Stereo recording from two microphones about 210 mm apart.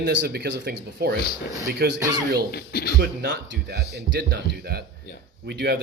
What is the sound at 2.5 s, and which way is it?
Speech, 50° left (ahead or behind).